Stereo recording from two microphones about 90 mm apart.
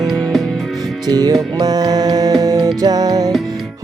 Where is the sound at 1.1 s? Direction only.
45° right (ahead or behind).